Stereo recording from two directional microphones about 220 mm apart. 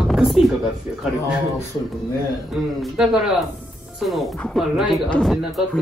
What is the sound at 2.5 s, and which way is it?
Speech, centre (ahead or behind).